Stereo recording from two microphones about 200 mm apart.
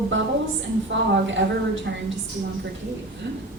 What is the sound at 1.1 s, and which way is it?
A woman's voice, 65° right (ahead or behind).